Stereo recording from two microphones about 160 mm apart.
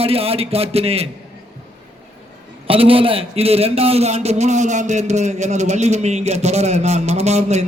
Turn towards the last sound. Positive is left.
turn(degrees=-45)  # may be behind; listen again after turning